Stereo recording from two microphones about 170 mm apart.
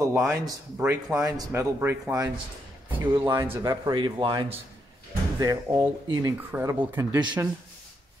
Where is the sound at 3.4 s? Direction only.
20° right (ahead or behind).